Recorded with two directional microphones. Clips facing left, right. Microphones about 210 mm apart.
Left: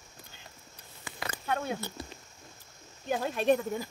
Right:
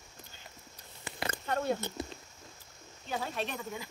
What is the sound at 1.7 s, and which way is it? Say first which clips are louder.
Speech: right 1 dB; 20° right (ahead or behind).